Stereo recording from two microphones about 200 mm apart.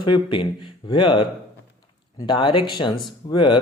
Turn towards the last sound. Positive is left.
turn(degrees=25)  # may be behind; listen again after turning